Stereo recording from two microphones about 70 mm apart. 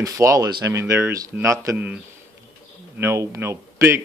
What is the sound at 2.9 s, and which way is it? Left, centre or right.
Speech, right.